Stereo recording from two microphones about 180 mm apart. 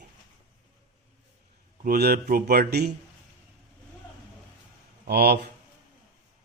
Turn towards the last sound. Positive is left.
turn(degrees=-65)  # may be behind; listen again after turning